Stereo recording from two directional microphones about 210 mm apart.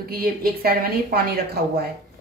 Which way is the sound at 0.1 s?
45° right (ahead or behind).